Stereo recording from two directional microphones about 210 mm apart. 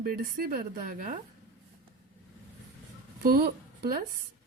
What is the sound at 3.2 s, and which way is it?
Speech, 50° right (ahead or behind).